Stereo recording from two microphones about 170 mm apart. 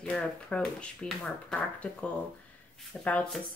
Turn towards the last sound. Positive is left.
turn(degrees=5)  # may be behind; listen again after turning